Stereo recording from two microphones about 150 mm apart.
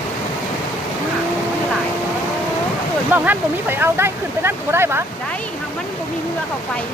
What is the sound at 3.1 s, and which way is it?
Speech, 15° right (ahead or behind).